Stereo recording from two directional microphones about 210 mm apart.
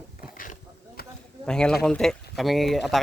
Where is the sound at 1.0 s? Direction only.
45° left (ahead or behind).